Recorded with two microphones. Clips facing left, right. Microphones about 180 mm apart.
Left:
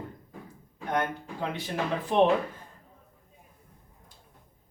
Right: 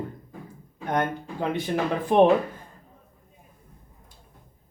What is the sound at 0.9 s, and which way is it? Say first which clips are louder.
Speech: right 3 dB; 55° right (ahead or behind).